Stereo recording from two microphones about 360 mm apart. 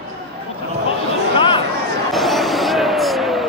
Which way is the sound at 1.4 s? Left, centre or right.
Centre.